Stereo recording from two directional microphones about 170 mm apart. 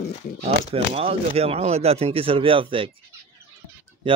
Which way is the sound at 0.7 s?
35° right (ahead or behind).